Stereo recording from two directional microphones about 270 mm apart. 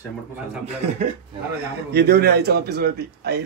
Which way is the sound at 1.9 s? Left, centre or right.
Right.